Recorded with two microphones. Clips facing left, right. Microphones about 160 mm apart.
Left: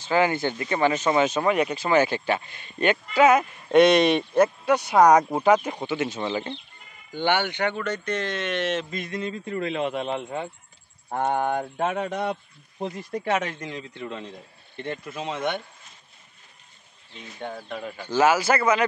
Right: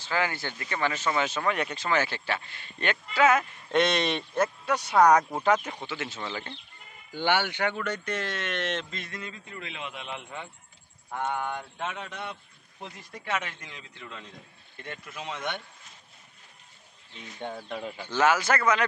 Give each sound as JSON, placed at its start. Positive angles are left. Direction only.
{"t": 0.0, "sound": "speech", "side_deg": 20}
{"t": 7.2, "sound": "speech", "side_deg": -5}
{"t": 9.2, "sound": "a man's voice", "side_deg": 40}
{"t": 17.4, "sound": "speech", "side_deg": 5}
{"t": 17.7, "sound": "speech", "side_deg": -15}
{"t": 18.0, "sound": "speech", "side_deg": 10}